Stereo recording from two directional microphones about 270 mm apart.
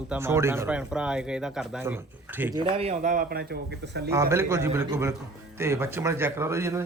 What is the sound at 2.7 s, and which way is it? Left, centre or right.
Speech, right.